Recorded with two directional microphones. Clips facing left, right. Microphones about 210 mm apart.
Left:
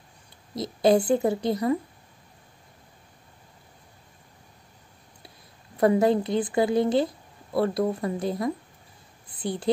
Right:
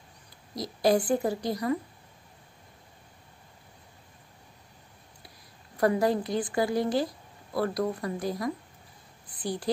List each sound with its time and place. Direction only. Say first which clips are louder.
0.6 s a woman's voice: left 4 dB; 25° left (ahead or behind)
5.8 s a woman's voice: left 4 dB; 25° left (ahead or behind)